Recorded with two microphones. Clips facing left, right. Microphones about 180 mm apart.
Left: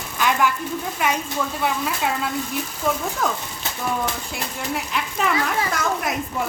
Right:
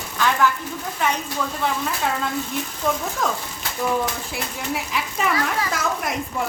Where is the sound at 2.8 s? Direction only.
5° left (ahead or behind).